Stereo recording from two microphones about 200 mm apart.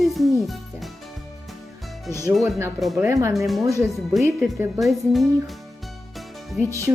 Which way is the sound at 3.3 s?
Centre (ahead or behind).